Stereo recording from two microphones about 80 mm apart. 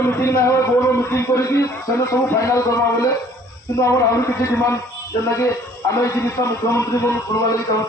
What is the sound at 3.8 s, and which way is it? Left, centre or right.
Speech, left.